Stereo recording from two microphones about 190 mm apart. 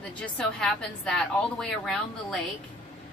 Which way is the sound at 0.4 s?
5° left (ahead or behind).